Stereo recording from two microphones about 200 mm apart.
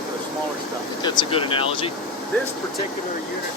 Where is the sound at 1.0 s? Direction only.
25° left (ahead or behind).